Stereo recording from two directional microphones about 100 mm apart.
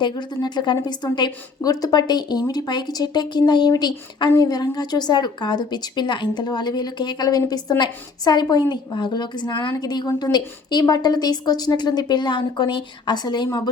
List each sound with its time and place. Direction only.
0.0 s speech: 50° left (ahead or behind)